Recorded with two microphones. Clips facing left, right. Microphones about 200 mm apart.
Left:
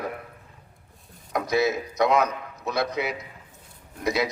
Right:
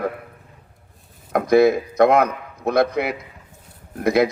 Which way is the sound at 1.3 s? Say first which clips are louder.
Right 9 dB; 55° right (ahead or behind).